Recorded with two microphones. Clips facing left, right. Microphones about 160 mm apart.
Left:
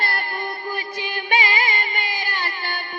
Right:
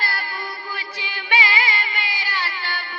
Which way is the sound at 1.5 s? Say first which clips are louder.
Left 1 dB; 45° left (ahead or behind).